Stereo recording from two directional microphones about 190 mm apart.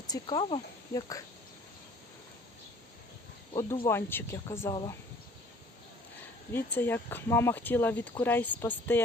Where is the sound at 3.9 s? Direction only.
10° left (ahead or behind).